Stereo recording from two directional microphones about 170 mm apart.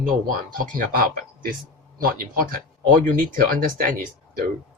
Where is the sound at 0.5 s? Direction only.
55° right (ahead or behind).